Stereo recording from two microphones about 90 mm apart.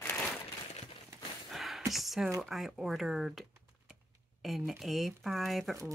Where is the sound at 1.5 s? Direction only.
Centre (ahead or behind).